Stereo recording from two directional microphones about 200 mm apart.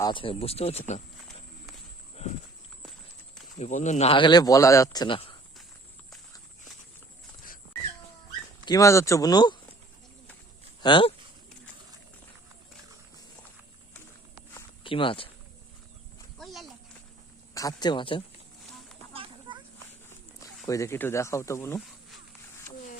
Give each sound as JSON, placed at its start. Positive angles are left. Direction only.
{"t": 0.0, "sound": "a man's voice", "side_deg": 25}
{"t": 3.6, "sound": "a man's voice", "side_deg": 35}
{"t": 8.6, "sound": "speech", "side_deg": 15}
{"t": 10.8, "sound": "speech", "side_deg": 25}
{"t": 14.8, "sound": "speech", "side_deg": 25}
{"t": 16.4, "sound": "a sound", "side_deg": 0}
{"t": 17.5, "sound": "speech", "side_deg": 20}
{"t": 19.1, "sound": "children playing", "side_deg": -25}
{"t": 20.7, "sound": "speech", "side_deg": 15}